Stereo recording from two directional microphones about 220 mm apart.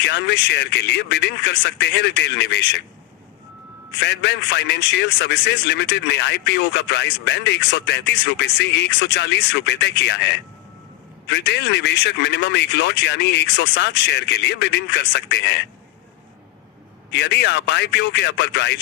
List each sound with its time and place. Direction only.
0.1 s a man's voice: 50° left (ahead or behind)
4.0 s a man's voice: 50° left (ahead or behind)
11.3 s a man's voice: 50° left (ahead or behind)
17.1 s a man's voice: 50° left (ahead or behind)